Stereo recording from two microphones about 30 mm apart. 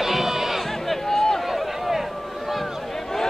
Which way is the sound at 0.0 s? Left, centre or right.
Centre.